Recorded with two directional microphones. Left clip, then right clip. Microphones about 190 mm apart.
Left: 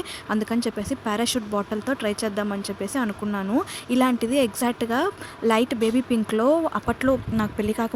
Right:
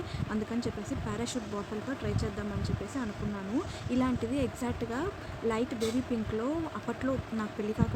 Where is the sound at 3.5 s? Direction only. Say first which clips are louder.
Left 9 dB; 45° left (ahead or behind).